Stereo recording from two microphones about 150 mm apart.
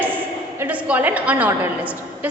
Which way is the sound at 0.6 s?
10° right (ahead or behind).